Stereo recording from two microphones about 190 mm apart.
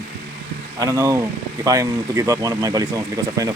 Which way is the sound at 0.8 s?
15° right (ahead or behind).